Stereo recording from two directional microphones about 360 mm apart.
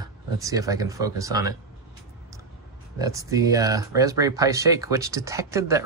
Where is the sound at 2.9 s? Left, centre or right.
Centre.